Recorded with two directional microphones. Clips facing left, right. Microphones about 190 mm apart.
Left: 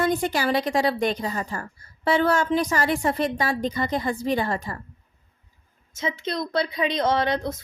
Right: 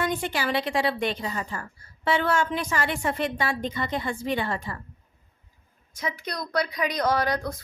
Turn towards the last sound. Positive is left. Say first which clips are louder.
# left 2 dB
turn(degrees=25)  # may be behind; listen again after turning